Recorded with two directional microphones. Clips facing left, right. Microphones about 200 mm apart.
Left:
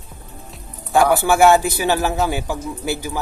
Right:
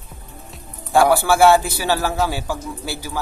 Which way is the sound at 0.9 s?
15° left (ahead or behind).